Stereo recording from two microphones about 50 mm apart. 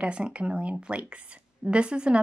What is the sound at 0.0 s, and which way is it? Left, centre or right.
Speech, right.